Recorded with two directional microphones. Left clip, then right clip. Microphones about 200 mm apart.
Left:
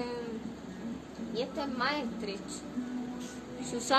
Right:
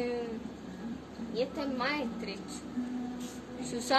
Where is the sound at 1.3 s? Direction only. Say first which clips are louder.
Right 1 dB; 10° left (ahead or behind).